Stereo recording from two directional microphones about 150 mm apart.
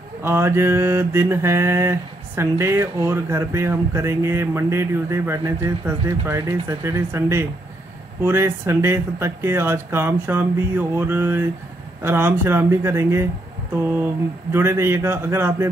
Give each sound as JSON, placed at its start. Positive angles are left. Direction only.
{"t": 0.2, "sound": "mantra", "side_deg": -15}